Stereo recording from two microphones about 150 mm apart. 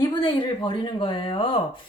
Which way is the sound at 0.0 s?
30° left (ahead or behind).